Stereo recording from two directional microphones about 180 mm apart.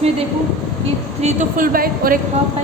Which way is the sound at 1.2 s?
45° right (ahead or behind).